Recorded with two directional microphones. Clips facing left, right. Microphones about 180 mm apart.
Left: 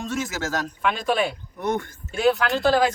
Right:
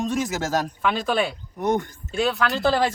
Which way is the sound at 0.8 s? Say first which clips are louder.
Left 2 dB; centre (ahead or behind).